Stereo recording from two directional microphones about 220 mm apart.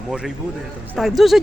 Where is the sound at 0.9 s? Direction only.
Centre (ahead or behind).